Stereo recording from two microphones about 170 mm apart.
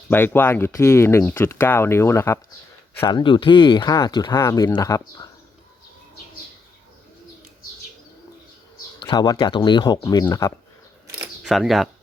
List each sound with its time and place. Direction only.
0.1 s speech: 10° left (ahead or behind)
3.0 s speech: 25° left (ahead or behind)
9.0 s speech: 25° left (ahead or behind)
11.2 s a sound: centre (ahead or behind)